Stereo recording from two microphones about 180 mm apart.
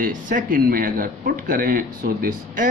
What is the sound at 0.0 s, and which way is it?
Speech, 50° right (ahead or behind).